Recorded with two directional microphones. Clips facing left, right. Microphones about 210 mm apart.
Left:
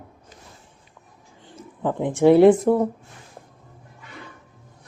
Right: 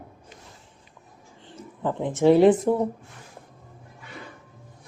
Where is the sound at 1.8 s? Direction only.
15° left (ahead or behind).